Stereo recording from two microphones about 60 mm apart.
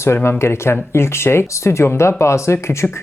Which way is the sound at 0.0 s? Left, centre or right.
Left.